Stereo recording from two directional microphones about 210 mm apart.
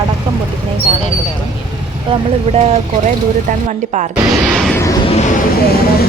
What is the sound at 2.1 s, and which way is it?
A woman's voice, 30° right (ahead or behind).